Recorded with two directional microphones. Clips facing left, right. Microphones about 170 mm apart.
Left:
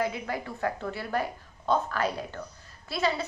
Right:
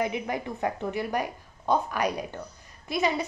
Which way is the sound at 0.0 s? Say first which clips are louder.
Right 2 dB; 20° right (ahead or behind).